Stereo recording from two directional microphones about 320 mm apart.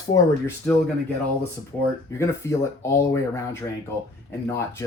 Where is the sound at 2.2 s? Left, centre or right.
Centre.